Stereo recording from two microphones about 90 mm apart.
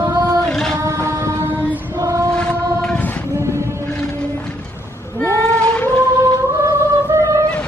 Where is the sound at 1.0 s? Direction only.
35° right (ahead or behind).